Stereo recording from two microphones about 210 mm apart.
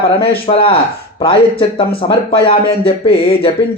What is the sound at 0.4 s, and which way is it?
A man's voice, 30° left (ahead or behind).